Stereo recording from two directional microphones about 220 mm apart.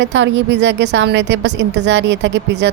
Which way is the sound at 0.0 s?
55° right (ahead or behind).